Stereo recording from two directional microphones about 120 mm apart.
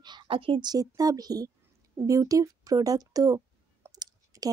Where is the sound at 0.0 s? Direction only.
40° right (ahead or behind).